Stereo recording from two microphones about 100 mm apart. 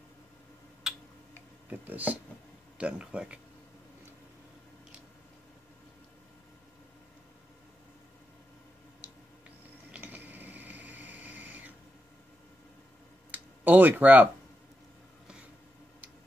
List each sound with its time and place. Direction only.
0.8 s tick-tock: 5° right (ahead or behind)
1.7 s speech: 15° right (ahead or behind)
9.8 s sewing machine: 15° right (ahead or behind)
13.3 s a sound: 20° right (ahead or behind)